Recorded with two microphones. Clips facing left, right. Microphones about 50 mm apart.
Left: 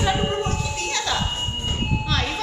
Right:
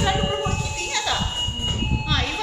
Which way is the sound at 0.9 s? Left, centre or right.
Centre.